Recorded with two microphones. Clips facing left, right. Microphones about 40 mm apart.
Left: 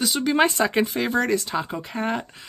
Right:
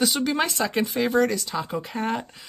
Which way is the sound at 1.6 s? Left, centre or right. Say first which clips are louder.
Even; centre.